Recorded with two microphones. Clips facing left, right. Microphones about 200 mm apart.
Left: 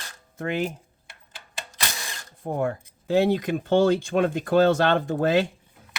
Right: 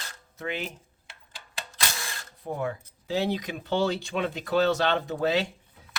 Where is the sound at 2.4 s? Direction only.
50° left (ahead or behind).